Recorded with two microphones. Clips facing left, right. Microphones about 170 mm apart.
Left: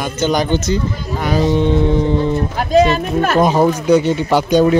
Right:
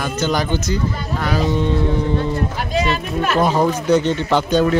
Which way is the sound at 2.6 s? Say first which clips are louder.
Left 12 dB; 45° left (ahead or behind).